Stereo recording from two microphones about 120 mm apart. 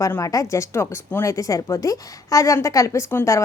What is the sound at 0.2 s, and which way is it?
A woman's voice, 30° left (ahead or behind).